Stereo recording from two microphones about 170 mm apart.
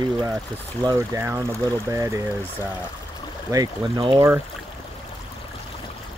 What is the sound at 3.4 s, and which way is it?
Speech, 20° right (ahead or behind).